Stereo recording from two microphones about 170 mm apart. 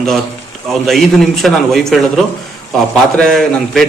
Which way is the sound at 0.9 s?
Centre (ahead or behind).